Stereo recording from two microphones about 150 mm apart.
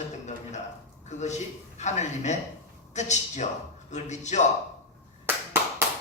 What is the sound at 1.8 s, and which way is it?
A man's voice, 50° left (ahead or behind).